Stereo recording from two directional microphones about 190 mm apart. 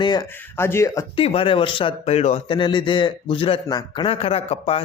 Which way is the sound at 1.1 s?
30° left (ahead or behind).